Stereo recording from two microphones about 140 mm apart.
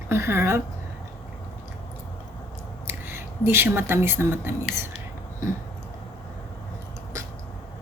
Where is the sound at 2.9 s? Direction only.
15° right (ahead or behind).